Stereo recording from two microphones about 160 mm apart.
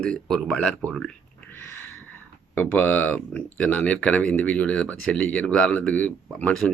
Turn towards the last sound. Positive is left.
turn(degrees=10)  # may be behind; listen again after turning